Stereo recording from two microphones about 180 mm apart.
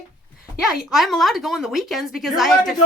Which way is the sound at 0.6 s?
Centre (ahead or behind).